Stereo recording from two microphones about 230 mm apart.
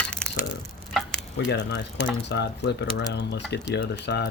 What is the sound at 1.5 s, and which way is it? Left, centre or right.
Speech, left.